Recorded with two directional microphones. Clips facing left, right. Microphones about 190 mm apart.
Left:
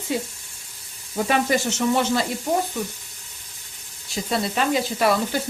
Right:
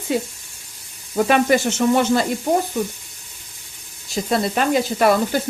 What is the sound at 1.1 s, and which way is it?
Speech, 60° right (ahead or behind).